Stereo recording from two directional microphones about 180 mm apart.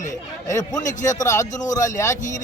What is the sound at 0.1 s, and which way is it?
A man's voice, 20° left (ahead or behind).